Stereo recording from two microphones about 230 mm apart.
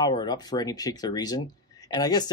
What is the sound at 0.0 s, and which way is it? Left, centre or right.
Speech, centre.